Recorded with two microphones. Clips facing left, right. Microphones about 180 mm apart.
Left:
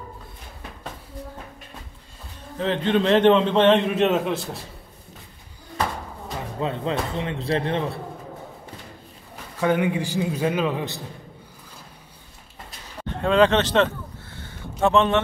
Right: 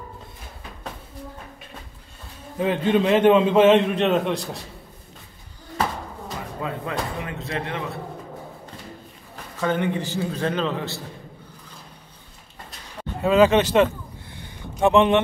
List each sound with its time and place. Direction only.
2.6 s a man's voice: 10° right (ahead or behind)
6.6 s speech: 25° left (ahead or behind)
9.6 s a man's voice: 10° left (ahead or behind)
13.1 s speech: 5° right (ahead or behind)
14.3 s vehicle: 15° right (ahead or behind)